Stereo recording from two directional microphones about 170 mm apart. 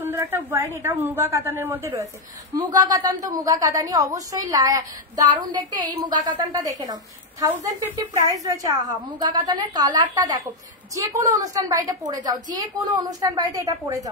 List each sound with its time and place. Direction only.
0.0 s a woman's voice: 10° right (ahead or behind)